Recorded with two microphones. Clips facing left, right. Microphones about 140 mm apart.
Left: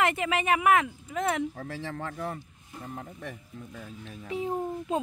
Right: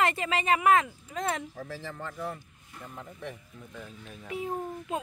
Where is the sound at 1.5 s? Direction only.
65° left (ahead or behind).